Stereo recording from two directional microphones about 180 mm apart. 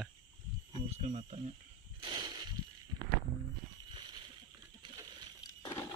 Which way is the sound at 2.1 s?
20° right (ahead or behind).